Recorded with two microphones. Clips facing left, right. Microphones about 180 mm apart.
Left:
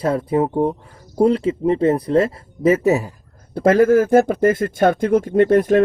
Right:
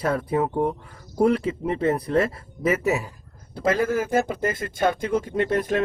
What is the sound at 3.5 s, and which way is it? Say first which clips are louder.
Speech: left 9 dB; 50° left (ahead or behind).